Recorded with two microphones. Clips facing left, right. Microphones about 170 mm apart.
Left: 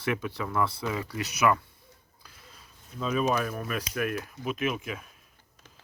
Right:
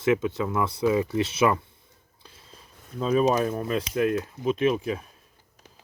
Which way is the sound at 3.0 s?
35° right (ahead or behind).